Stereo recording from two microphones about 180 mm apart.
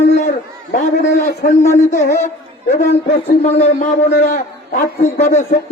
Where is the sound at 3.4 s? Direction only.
35° left (ahead or behind).